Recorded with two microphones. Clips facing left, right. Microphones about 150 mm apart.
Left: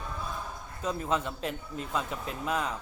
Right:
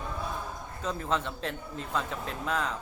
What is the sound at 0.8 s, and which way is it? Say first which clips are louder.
Speech: left 1 dB; 10° left (ahead or behind).